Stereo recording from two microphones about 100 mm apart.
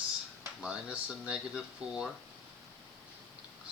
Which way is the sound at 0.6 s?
10° right (ahead or behind).